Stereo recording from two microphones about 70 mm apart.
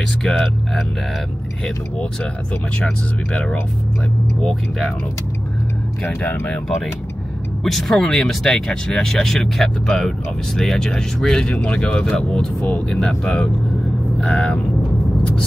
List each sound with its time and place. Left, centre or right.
0.2 s speech: centre
4.4 s speech: centre
6.0 s speech: left
7.6 s speech: centre
14.1 s vehicle: centre